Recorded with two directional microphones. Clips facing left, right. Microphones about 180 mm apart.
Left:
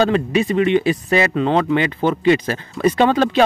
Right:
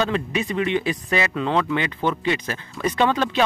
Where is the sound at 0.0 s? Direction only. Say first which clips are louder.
Left 7 dB; 30° left (ahead or behind).